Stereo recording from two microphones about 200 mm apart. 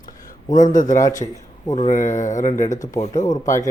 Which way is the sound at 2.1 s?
40° left (ahead or behind).